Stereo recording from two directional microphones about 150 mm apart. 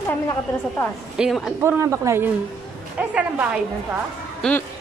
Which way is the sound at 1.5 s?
20° right (ahead or behind).